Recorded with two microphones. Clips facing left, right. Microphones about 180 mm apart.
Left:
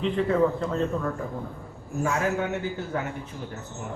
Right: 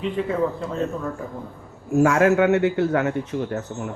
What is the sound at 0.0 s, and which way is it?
Speech, 5° right (ahead or behind).